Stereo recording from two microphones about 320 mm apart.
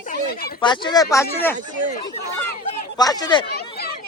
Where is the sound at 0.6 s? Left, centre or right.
Centre.